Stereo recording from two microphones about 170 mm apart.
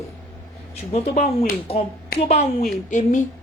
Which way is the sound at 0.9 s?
40° left (ahead or behind).